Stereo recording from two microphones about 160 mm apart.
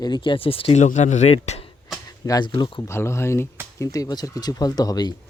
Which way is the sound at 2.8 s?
15° left (ahead or behind).